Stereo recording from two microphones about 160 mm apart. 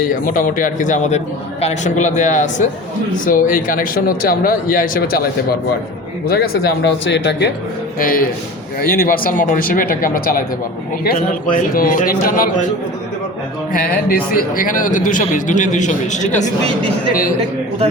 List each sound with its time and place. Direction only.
0.3 s a man's voice: 60° left (ahead or behind); by 7.5 s 90° left
7.9 s speech: 60° left (ahead or behind)
13.7 s a man's voice: 65° left (ahead or behind); by 16.5 s 50° left (ahead or behind)